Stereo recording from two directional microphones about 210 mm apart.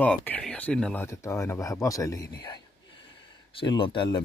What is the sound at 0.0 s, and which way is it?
Speech, 5° left (ahead or behind).